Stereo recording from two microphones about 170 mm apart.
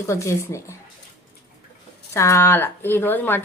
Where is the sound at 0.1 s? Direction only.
15° left (ahead or behind).